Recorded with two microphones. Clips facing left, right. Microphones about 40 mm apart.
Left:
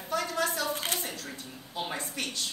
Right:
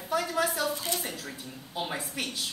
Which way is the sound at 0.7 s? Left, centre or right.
Left.